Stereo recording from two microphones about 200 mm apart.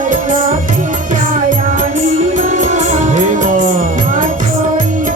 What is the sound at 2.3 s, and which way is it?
Music, 40° right (ahead or behind).